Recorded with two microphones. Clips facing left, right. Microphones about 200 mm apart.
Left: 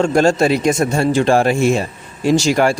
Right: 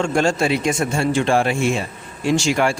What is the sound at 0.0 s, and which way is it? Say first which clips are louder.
Speech: left 5 dB; 40° left (ahead or behind).